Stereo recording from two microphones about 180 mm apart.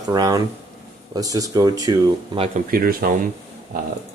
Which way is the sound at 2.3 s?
35° right (ahead or behind).